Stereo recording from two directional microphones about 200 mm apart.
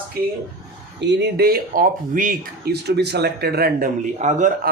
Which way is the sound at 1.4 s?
45° right (ahead or behind).